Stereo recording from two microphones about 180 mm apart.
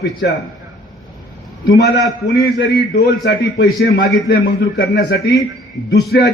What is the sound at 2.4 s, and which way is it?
A man's voice, 65° left (ahead or behind).